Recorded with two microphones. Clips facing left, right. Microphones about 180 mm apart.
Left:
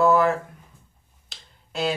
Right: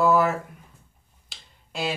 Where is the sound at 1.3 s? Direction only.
Centre (ahead or behind).